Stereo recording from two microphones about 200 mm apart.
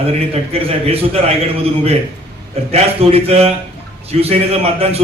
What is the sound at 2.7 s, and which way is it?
A man's voice, 30° right (ahead or behind).